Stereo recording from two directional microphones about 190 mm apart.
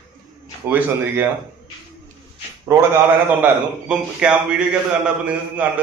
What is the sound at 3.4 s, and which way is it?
A man's voice, 5° right (ahead or behind).